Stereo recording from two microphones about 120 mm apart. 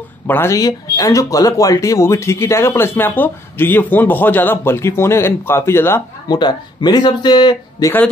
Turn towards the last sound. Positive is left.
turn(degrees=35)  # may be behind; listen again after turning